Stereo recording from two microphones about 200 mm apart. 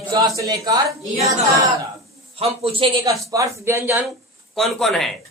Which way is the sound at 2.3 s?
30° right (ahead or behind).